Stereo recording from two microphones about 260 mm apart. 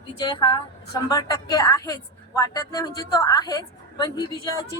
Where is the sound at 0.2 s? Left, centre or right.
Centre.